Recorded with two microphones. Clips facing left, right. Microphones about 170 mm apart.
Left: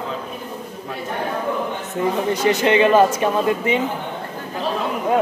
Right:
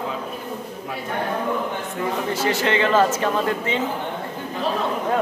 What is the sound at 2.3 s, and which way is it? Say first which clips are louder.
Speech: left 5 dB; 20° left (ahead or behind).